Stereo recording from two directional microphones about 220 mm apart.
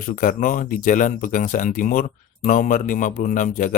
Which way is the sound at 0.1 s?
35° left (ahead or behind).